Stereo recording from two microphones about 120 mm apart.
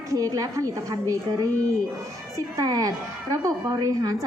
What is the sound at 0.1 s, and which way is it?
A woman's voice, 30° right (ahead or behind).